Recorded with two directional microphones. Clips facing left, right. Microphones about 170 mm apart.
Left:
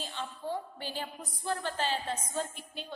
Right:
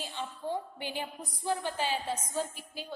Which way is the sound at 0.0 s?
15° right (ahead or behind).